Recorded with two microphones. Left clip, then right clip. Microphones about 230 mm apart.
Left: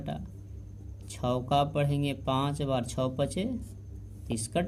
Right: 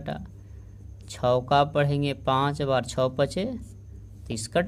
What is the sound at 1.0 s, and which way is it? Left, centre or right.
Speech, right.